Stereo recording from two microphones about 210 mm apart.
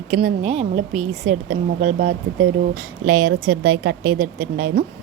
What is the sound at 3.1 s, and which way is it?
Speech, 75° right (ahead or behind).